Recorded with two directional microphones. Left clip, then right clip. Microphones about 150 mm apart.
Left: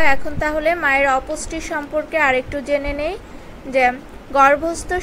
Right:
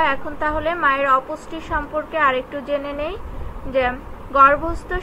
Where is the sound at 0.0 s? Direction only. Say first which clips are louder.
Left 2 dB; 35° left (ahead or behind).